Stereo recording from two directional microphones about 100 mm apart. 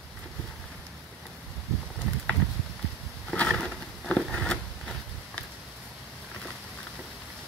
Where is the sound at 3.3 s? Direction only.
5° left (ahead or behind).